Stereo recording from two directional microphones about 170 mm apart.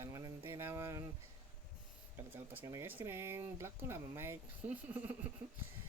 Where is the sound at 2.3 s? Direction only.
15° right (ahead or behind).